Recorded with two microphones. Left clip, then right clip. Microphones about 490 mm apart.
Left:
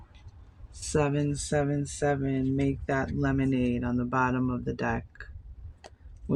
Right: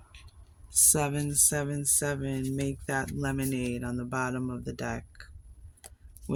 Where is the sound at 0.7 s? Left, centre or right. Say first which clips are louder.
Left 1 dB; right.